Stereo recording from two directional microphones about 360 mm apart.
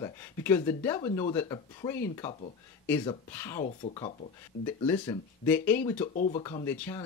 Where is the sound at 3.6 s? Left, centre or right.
Centre.